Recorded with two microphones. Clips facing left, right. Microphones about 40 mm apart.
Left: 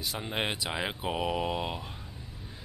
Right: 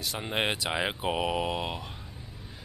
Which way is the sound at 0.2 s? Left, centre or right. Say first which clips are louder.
Right 4 dB; centre.